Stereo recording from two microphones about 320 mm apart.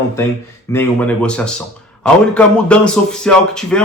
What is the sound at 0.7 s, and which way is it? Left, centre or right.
Speech, centre.